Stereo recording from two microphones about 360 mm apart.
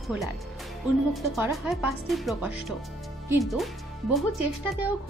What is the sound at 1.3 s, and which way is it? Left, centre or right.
Speech, centre.